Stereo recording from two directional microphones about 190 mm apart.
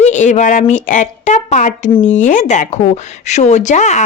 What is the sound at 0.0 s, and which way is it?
Speech, 40° left (ahead or behind).